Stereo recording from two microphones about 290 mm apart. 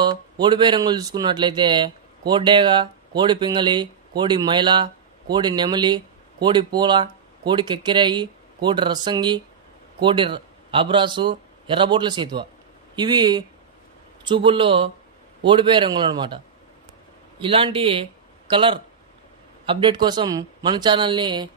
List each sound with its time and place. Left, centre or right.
0.0 s a man's voice: centre
17.4 s a man's voice: centre